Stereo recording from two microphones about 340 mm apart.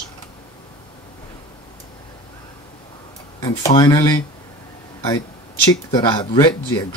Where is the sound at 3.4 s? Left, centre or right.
Centre.